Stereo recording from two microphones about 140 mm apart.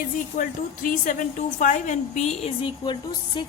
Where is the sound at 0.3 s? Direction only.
70° left (ahead or behind); by 2.6 s 50° left (ahead or behind).